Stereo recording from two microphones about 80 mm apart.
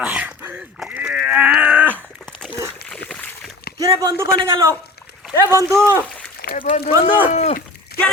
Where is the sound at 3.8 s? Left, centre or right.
Right.